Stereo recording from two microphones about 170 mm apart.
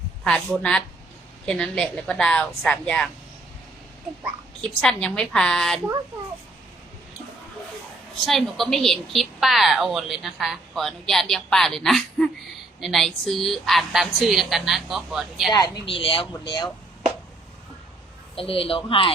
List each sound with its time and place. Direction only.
0.3 s a woman's voice: 5° left (ahead or behind)
4.8 s a woman's voice: 5° left (ahead or behind)
8.3 s a woman's voice: centre (ahead or behind)
15.5 s speech: 20° left (ahead or behind)
18.3 s speech: 35° left (ahead or behind)